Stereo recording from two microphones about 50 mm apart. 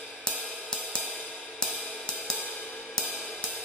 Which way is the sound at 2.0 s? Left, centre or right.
Centre.